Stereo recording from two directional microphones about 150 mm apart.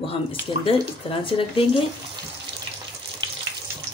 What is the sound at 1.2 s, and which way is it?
Speech, 35° left (ahead or behind).